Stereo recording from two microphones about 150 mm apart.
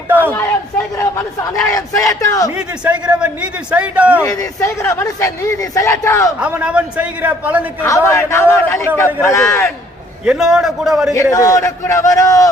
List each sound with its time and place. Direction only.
0.1 s a man's voice: 15° right (ahead or behind)
0.9 s speech: 20° left (ahead or behind)
2.5 s a man's voice: 10° right (ahead or behind)
4.2 s speech: 20° left (ahead or behind)
6.4 s a man's voice: 10° right (ahead or behind)
7.8 s a man's voice: 20° left (ahead or behind)
10.2 s a man's voice: 5° right (ahead or behind)
11.1 s speech: 20° left (ahead or behind)